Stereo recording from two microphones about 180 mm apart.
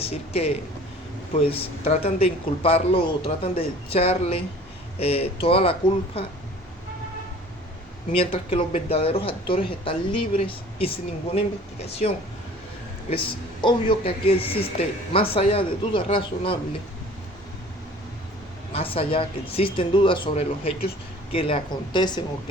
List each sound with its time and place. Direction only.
0.0 s speech: 35° left (ahead or behind)
8.1 s speech: 30° left (ahead or behind)
18.7 s speech: 30° left (ahead or behind)